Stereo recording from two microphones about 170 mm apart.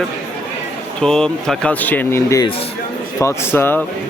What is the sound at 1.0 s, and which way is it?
Speech, 5° left (ahead or behind).